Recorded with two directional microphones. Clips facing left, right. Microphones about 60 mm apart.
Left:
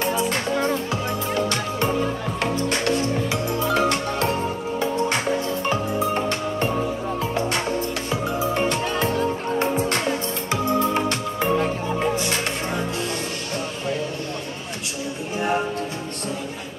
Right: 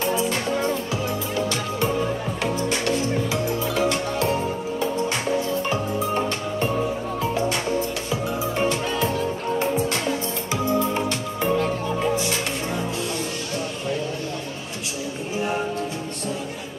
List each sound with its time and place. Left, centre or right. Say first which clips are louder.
1.3 s music: left 1 dB; left
3.3 s music: left 1 dB; left
10.5 s music: left 2 dB; left